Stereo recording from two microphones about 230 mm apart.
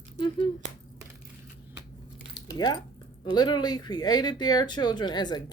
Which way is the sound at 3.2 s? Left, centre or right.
Centre.